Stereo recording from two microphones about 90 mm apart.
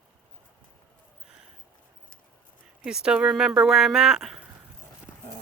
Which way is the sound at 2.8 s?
10° right (ahead or behind).